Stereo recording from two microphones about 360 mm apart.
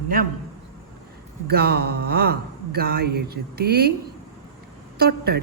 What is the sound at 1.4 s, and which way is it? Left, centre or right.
Speech, right.